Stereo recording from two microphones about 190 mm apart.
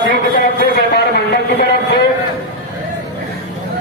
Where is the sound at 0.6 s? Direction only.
55° left (ahead or behind).